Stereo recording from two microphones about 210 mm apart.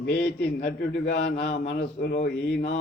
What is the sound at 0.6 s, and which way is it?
A man's voice, 50° left (ahead or behind).